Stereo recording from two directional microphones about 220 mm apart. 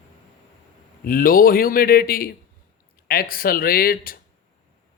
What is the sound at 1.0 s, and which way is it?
A man's voice, 40° left (ahead or behind).